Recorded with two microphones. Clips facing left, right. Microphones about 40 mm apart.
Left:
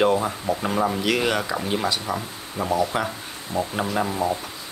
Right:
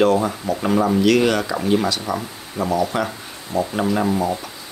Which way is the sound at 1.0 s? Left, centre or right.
Centre.